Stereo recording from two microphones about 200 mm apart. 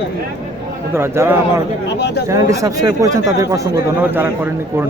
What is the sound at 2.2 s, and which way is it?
Speech, 15° right (ahead or behind).